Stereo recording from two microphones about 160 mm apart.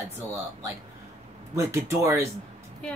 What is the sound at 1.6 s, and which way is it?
Speech, 20° right (ahead or behind).